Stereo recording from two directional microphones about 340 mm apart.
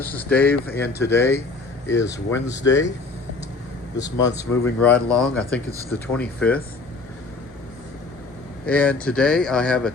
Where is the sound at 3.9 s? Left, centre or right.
Centre.